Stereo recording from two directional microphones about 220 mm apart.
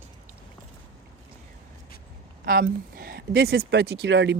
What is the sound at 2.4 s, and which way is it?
Speech, 40° right (ahead or behind).